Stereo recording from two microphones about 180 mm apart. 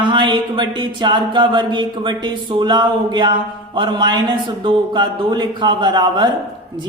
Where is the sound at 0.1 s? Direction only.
25° right (ahead or behind).